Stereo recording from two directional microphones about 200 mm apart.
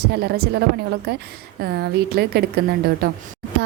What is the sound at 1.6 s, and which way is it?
Speech, 55° right (ahead or behind).